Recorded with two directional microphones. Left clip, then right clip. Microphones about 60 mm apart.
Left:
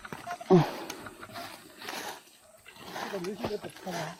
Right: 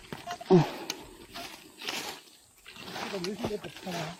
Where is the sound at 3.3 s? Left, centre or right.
Centre.